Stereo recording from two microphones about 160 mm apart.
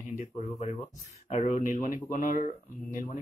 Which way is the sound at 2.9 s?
55° left (ahead or behind).